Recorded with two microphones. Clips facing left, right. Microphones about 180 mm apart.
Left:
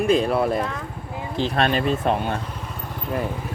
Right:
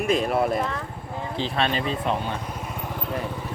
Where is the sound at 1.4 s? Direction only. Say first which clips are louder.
Left 5 dB; 50° left (ahead or behind).